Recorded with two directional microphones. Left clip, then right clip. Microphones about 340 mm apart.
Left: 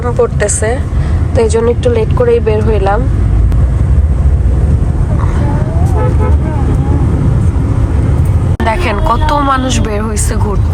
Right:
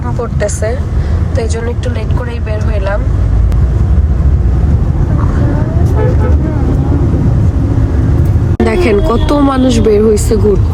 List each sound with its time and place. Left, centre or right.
0.2 s speech: centre
8.6 s speech: centre